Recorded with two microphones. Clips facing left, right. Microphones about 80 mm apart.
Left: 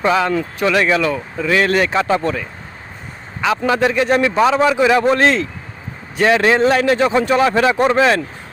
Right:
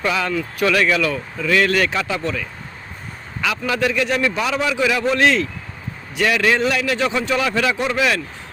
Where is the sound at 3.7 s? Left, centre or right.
Left.